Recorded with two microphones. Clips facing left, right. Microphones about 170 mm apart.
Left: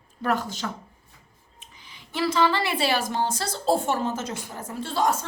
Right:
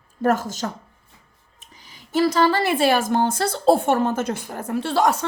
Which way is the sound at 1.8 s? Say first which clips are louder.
Right 7 dB; 45° right (ahead or behind).